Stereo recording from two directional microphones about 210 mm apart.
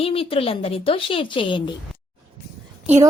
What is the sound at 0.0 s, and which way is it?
A woman's voice, 25° left (ahead or behind).